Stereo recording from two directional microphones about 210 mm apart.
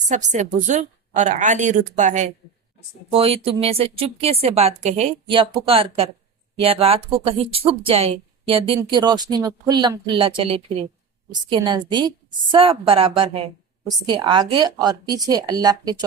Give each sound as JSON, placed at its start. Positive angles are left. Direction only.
{"t": 0.1, "sound": "a woman's voice", "side_deg": -35}